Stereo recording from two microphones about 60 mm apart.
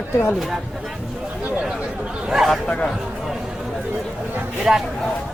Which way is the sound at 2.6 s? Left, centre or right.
Centre.